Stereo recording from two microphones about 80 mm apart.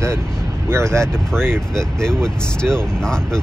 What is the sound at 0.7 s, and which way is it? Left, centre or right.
Speech, right.